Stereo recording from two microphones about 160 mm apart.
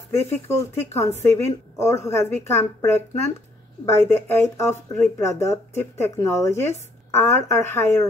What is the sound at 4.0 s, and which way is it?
Speech, 15° left (ahead or behind).